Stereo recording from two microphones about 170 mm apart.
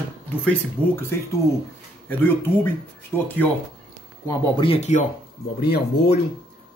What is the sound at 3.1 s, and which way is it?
Speech, 10° left (ahead or behind).